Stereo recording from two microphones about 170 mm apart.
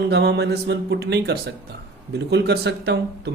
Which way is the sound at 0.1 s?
75° right (ahead or behind).